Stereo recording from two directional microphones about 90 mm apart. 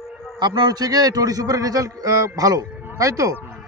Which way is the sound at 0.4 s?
50° right (ahead or behind).